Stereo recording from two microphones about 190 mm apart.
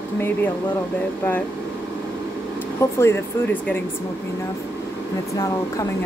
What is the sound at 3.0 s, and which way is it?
Speech, 10° left (ahead or behind).